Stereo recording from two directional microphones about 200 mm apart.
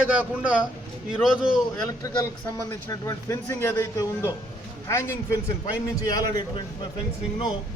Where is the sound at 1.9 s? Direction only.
15° left (ahead or behind).